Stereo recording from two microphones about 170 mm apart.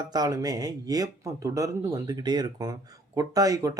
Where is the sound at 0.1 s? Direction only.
20° right (ahead or behind).